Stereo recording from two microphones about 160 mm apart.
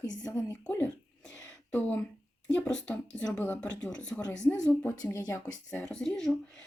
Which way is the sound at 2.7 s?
5° left (ahead or behind).